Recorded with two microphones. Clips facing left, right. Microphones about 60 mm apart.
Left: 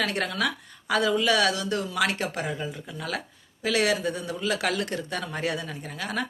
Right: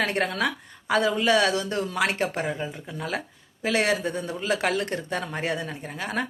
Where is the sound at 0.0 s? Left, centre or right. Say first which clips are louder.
Right 2 dB; right.